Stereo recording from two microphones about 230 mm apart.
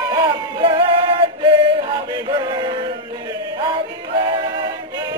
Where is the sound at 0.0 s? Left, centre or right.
Centre.